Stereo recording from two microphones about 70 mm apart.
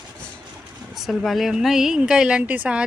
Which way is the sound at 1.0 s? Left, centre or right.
Centre.